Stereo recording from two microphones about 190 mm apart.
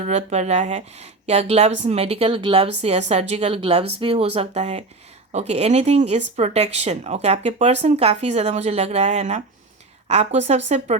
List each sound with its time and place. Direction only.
0.0 s speech: 35° right (ahead or behind)